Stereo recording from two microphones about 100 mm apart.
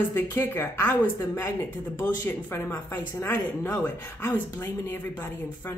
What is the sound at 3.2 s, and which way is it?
Speech, 25° left (ahead or behind).